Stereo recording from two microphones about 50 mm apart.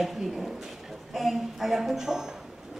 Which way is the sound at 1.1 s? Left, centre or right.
Centre.